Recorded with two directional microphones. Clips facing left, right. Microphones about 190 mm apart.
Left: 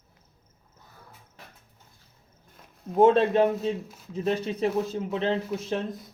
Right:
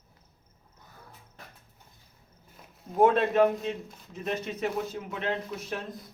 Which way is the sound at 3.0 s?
25° left (ahead or behind).